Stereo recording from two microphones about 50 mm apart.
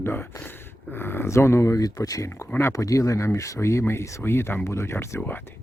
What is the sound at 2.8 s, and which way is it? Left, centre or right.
Speech, left.